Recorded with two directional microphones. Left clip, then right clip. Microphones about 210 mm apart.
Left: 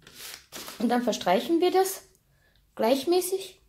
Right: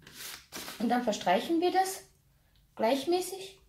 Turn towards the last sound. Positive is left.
turn(degrees=45)  # may be behind; listen again after turning